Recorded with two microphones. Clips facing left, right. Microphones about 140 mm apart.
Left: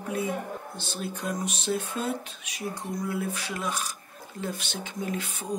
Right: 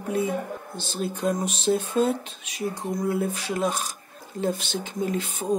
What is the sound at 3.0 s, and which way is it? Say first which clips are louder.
Speech: right 6 dB; 40° right (ahead or behind).